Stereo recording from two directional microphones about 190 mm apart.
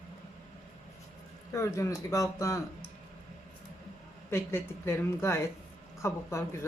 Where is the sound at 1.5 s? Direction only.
15° left (ahead or behind).